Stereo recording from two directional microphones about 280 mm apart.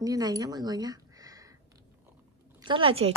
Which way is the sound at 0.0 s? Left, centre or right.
Centre.